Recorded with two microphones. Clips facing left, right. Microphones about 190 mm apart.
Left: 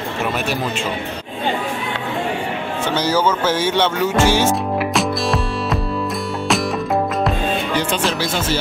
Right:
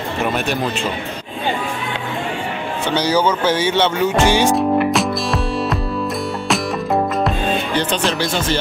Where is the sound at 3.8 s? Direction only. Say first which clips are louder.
Right 1 dB; 15° right (ahead or behind).